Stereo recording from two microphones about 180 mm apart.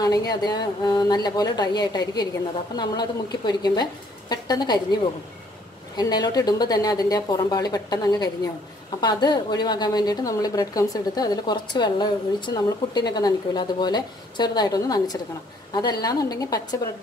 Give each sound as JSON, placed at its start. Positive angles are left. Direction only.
{"t": 0.0, "sound": "a woman's voice", "side_deg": 20}
{"t": 5.9, "sound": "a woman's voice", "side_deg": 20}